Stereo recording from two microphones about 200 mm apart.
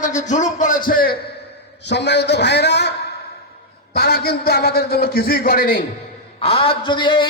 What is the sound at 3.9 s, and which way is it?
A man's voice, 50° left (ahead or behind).